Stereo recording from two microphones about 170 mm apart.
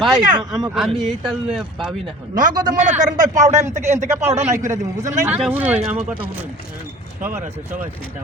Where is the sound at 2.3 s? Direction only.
50° right (ahead or behind).